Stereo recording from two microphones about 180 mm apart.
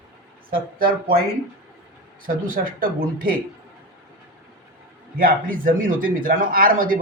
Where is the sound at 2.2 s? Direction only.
50° right (ahead or behind).